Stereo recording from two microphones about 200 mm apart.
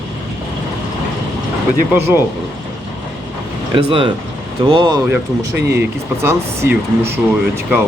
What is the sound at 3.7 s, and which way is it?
Speech, 25° right (ahead or behind).